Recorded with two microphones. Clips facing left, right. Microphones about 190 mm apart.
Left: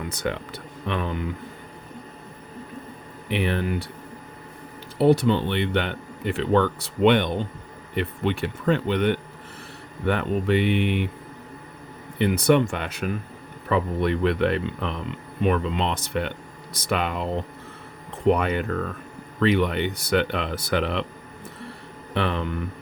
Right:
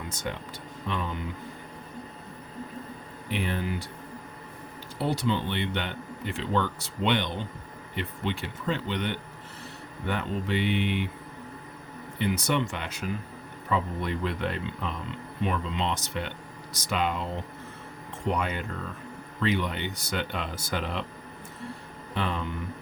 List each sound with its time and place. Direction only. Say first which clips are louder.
0.1 s speech: left 6 dB; 65° left (ahead or behind)
3.2 s speech: left 6 dB; 70° left (ahead or behind)
4.9 s speech: left 9 dB; 60° left (ahead or behind)
12.2 s speech: left 8 dB; 60° left (ahead or behind)
18.3 s speech: left 9 dB; 60° left (ahead or behind)
22.1 s speech: left 5 dB; 70° left (ahead or behind)